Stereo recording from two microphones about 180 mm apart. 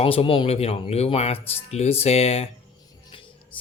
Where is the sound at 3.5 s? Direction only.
30° left (ahead or behind).